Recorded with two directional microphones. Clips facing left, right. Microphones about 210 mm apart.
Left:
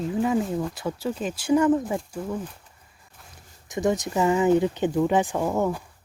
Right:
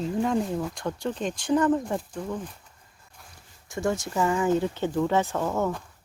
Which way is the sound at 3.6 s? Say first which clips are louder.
Left 3 dB; 20° left (ahead or behind).